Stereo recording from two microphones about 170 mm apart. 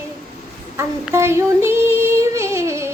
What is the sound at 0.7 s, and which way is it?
Female singing, 15° right (ahead or behind).